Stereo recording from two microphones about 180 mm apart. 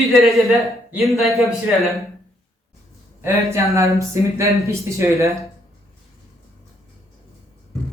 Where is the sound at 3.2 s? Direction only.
15° right (ahead or behind).